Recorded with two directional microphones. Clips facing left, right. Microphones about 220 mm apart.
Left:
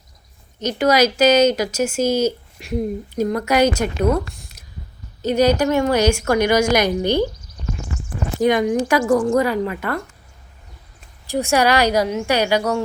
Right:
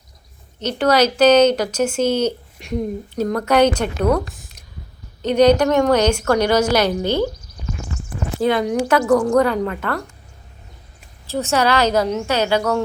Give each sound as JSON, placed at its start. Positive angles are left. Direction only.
{"t": 0.6, "sound": "a woman's voice", "side_deg": 10}
{"t": 8.4, "sound": "a woman's voice", "side_deg": 15}
{"t": 11.3, "sound": "a woman's voice", "side_deg": 15}